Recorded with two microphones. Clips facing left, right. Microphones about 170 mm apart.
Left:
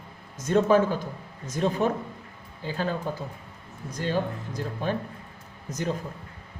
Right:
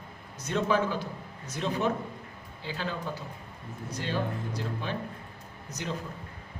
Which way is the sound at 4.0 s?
45° left (ahead or behind).